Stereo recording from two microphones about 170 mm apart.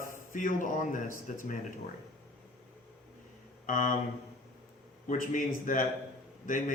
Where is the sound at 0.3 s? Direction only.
50° left (ahead or behind).